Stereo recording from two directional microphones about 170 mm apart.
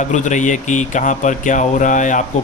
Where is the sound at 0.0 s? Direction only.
45° left (ahead or behind).